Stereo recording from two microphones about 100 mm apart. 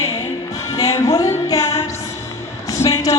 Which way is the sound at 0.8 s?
35° left (ahead or behind).